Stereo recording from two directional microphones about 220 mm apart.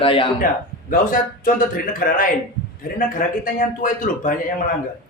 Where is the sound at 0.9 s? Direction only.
40° left (ahead or behind).